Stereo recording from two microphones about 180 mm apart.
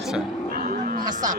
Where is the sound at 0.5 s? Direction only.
50° right (ahead or behind).